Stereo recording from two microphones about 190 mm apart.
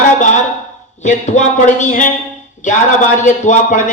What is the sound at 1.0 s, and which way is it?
Speech, 40° left (ahead or behind).